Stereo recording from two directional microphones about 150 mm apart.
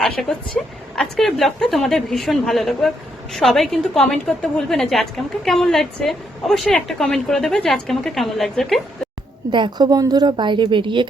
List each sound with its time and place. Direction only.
0.0 s a woman's voice: 5° left (ahead or behind)
9.5 s a woman's voice: 30° right (ahead or behind)